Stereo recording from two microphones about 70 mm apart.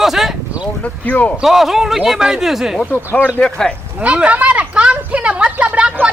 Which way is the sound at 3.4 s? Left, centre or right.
Centre.